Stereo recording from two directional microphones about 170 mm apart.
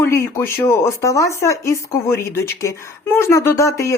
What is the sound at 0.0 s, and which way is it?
Speech, 15° left (ahead or behind).